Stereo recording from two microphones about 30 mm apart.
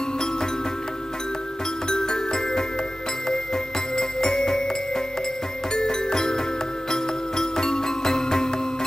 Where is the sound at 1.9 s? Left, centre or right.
Left.